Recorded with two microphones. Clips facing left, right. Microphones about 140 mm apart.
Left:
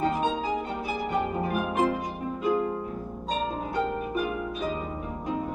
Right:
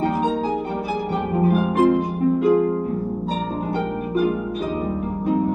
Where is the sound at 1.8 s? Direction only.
65° right (ahead or behind).